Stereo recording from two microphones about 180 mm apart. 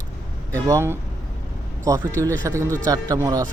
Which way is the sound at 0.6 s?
15° right (ahead or behind).